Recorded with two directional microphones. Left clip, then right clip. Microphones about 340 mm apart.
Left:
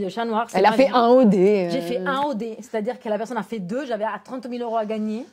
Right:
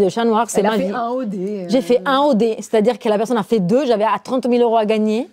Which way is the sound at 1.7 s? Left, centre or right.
Right.